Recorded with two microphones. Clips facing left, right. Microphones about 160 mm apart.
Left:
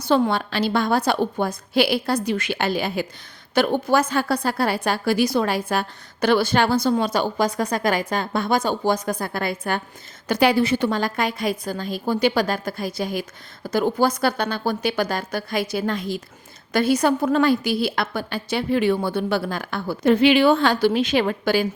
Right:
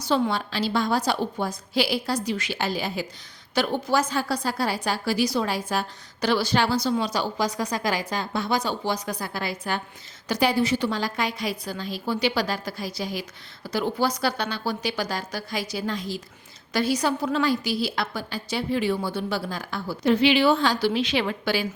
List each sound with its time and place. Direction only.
0.0 s a woman's voice: 55° left (ahead or behind)